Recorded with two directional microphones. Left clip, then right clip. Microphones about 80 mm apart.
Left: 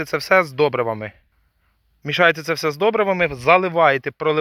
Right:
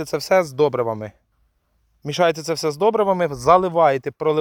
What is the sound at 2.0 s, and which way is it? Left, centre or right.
Speech, centre.